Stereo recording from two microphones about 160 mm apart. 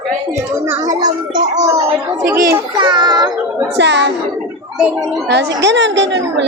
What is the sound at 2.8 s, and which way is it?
Speech, 25° right (ahead or behind).